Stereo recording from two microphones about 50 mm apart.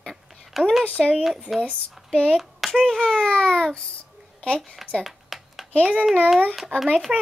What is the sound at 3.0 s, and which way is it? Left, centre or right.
Speech, centre.